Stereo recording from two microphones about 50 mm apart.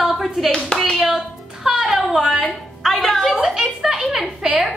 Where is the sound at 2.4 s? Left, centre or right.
Centre.